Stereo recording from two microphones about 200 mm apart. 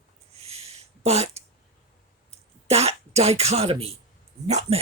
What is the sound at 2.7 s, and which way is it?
Speech, 30° right (ahead or behind).